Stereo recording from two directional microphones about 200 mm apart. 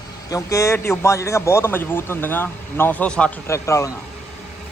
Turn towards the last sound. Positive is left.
turn(degrees=15)  # may be behind; listen again after turning